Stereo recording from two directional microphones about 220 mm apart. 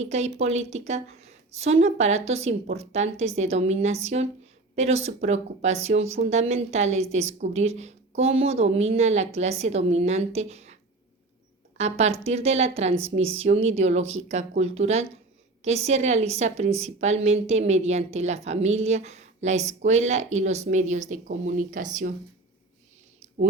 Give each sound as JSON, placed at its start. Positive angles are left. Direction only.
{"t": 0.0, "sound": "a woman's voice", "side_deg": -30}
{"t": 11.8, "sound": "a woman's voice", "side_deg": -30}